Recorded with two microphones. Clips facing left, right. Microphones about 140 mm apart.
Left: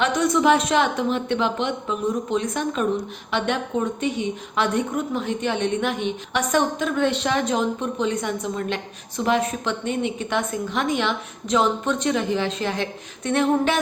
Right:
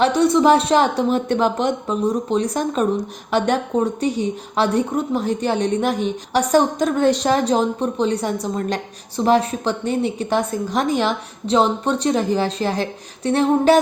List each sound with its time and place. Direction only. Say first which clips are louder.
0.0 s a woman's voice: right 5 dB; 30° right (ahead or behind)